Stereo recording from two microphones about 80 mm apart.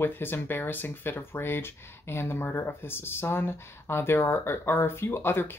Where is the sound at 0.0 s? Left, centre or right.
Left.